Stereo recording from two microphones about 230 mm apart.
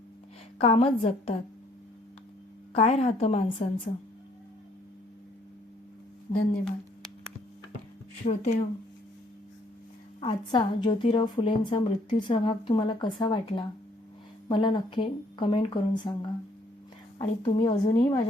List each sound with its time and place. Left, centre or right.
0.6 s a woman's voice: left
2.7 s a woman's voice: left
6.3 s speech: left
8.2 s speech: left
10.2 s a woman's voice: left